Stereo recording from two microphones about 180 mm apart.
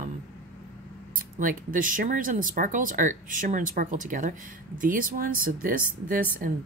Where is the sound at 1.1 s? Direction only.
50° right (ahead or behind).